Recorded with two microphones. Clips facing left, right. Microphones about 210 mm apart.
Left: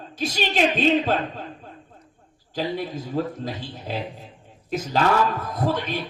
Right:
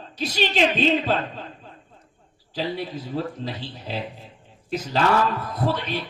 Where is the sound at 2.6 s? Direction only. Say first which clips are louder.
Left 1 dB; 45° left (ahead or behind).